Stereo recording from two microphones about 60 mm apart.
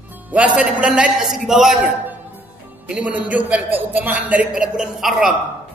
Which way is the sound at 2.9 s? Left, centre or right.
Right.